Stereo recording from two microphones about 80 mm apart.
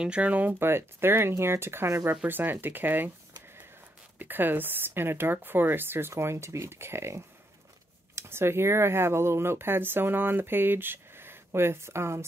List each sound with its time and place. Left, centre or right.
0.0 s speech: centre
4.2 s speech: right